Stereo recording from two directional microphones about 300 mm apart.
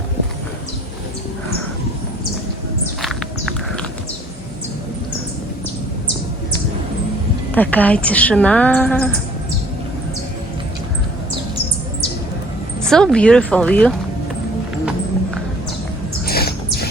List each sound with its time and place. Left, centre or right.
3.0 s walk: centre
7.5 s a woman's voice: centre
12.9 s a woman's voice: centre
16.2 s bird: left